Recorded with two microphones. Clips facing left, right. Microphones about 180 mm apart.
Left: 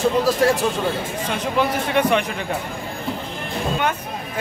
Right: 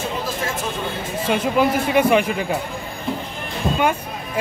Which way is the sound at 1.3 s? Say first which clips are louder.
Right 4 dB; 10° right (ahead or behind).